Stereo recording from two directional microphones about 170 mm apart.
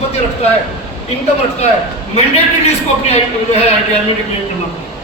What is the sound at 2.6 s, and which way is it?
Speech, 40° left (ahead or behind).